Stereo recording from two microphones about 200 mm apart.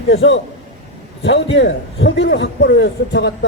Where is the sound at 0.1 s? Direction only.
65° left (ahead or behind).